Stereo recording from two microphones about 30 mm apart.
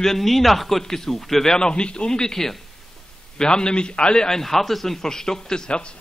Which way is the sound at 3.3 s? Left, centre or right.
Left.